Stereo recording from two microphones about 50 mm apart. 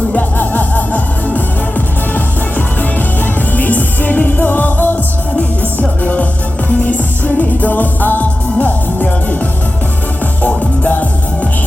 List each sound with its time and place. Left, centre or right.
0.3 s music: left
3.5 s music: left
6.7 s music: left
10.4 s music: left